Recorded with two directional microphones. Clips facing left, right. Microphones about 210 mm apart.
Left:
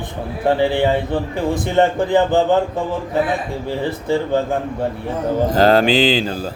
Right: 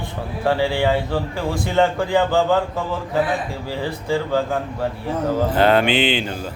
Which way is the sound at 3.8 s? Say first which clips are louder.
Left 2 dB; 20° left (ahead or behind).